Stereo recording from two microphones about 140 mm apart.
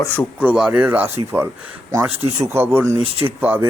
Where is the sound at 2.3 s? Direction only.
20° right (ahead or behind).